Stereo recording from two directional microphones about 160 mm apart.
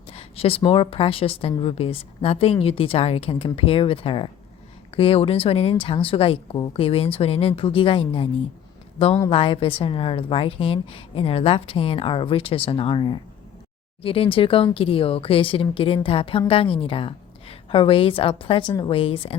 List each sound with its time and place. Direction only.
0.1 s a woman's voice: 35° left (ahead or behind)
9.3 s a woman's voice: 35° left (ahead or behind)